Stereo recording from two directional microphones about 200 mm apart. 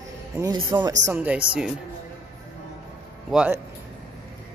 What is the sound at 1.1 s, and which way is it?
Speech, 5° right (ahead or behind).